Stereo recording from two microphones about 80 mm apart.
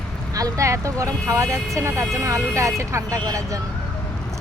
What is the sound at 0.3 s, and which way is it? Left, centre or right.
Speech, right.